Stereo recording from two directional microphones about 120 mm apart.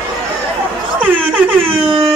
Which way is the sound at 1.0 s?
15° right (ahead or behind).